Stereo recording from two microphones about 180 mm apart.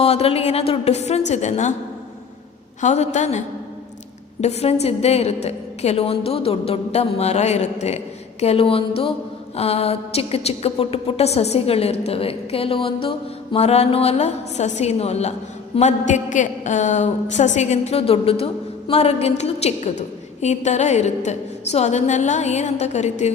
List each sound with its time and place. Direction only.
0.0 s a woman's voice: 35° left (ahead or behind)
2.8 s a woman's voice: 40° left (ahead or behind)